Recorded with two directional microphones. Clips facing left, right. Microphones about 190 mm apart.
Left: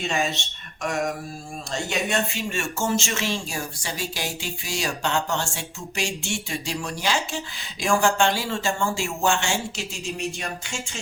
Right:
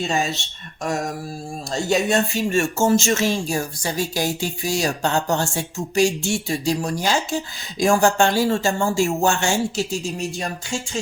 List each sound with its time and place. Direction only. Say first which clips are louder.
0.0 s speech: right 3 dB; 35° right (ahead or behind)
1.7 s speech: right 6 dB; 40° right (ahead or behind)